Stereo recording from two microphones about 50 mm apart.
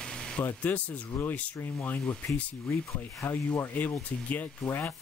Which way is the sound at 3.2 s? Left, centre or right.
Left.